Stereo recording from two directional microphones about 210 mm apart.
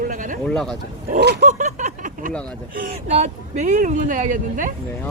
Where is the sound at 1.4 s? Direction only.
35° right (ahead or behind).